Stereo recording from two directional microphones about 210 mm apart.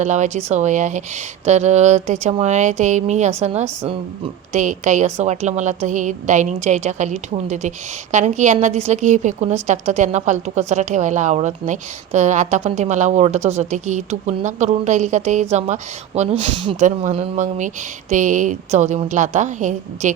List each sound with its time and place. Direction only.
0.0 s a woman's voice: 35° right (ahead or behind)